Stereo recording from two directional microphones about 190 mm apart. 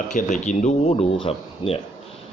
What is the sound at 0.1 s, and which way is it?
A man's voice, 40° left (ahead or behind).